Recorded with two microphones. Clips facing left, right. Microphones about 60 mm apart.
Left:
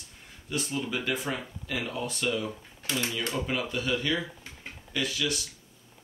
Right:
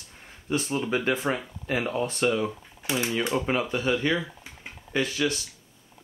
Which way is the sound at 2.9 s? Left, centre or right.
Right.